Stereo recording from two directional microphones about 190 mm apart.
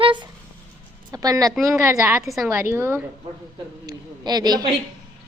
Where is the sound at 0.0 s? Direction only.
25° right (ahead or behind).